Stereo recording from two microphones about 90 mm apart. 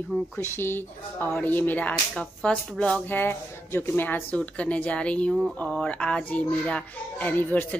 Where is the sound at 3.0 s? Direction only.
25° left (ahead or behind).